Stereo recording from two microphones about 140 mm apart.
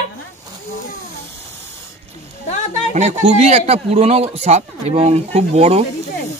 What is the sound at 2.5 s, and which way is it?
Music, 60° left (ahead or behind).